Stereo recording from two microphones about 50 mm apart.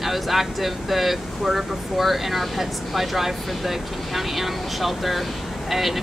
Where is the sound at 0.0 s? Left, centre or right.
Centre.